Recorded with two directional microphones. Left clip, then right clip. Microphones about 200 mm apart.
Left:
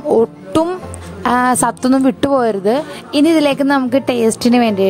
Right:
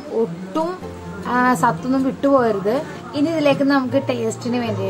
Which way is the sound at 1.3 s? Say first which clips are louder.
Left 3 dB; 60° left (ahead or behind).